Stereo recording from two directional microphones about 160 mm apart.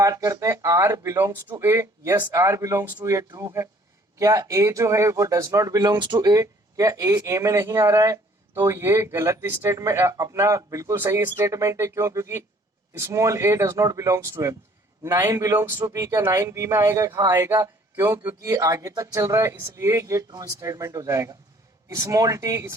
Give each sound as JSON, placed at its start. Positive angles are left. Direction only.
{"t": 0.0, "sound": "a man's voice", "side_deg": -20}